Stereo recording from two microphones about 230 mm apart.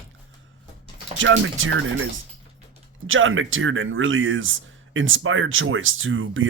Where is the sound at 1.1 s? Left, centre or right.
Right.